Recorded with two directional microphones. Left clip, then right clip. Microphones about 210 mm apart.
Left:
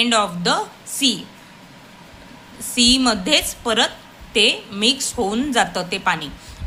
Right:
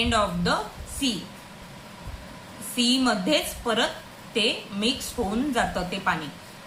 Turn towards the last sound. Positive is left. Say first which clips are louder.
# left 6 dB
turn(degrees=50)  # may be behind; listen again after turning